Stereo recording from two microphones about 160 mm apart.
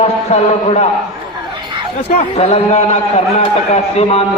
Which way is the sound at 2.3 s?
40° left (ahead or behind).